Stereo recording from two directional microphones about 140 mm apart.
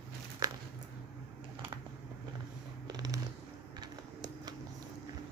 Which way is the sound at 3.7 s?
30° right (ahead or behind).